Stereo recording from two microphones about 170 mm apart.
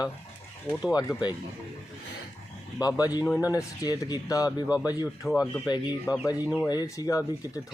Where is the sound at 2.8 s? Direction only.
20° left (ahead or behind).